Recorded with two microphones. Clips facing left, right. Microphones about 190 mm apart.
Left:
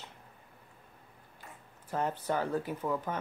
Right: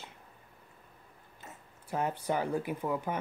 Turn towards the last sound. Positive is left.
turn(degrees=-10)  # may be behind; listen again after turning